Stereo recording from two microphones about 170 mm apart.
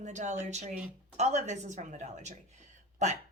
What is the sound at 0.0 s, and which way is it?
Speech, 45° right (ahead or behind).